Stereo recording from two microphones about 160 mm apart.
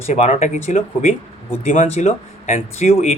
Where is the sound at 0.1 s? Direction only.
40° left (ahead or behind).